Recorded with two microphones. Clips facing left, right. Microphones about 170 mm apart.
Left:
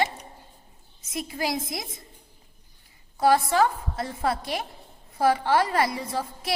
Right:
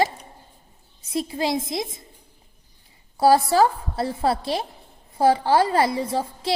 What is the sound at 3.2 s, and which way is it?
A woman's voice, 30° right (ahead or behind).